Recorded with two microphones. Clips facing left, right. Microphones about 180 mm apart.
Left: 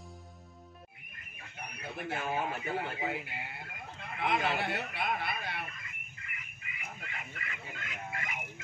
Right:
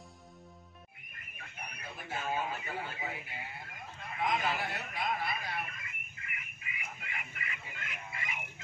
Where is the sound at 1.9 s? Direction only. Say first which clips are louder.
Left 2 dB; 65° left (ahead or behind).